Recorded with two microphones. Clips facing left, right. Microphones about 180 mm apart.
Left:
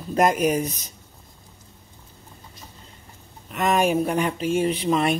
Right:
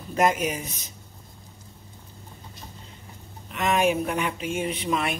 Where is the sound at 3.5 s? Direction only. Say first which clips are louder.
Left 3 dB; 40° left (ahead or behind).